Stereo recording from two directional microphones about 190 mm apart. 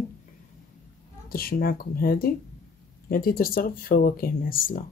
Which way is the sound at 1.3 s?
50° left (ahead or behind).